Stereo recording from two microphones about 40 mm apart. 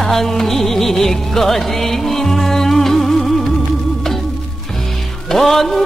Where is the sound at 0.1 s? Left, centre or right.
Centre.